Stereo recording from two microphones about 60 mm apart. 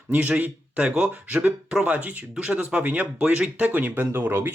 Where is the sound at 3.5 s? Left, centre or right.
Right.